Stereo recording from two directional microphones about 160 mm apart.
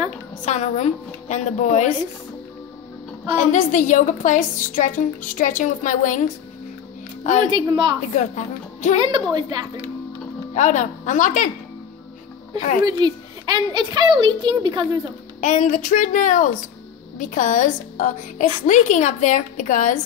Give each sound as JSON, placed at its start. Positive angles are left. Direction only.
{"t": 0.5, "sound": "a woman's voice", "side_deg": 45}
{"t": 3.5, "sound": "a woman's voice", "side_deg": 50}
{"t": 7.5, "sound": "a child's voice", "side_deg": -30}
{"t": 8.1, "sound": "speech", "side_deg": 50}
{"t": 8.9, "sound": "a child's voice", "side_deg": -30}
{"t": 10.5, "sound": "a woman's voice", "side_deg": 50}
{"t": 12.8, "sound": "a child's voice", "side_deg": -25}
{"t": 15.4, "sound": "a woman's voice", "side_deg": 50}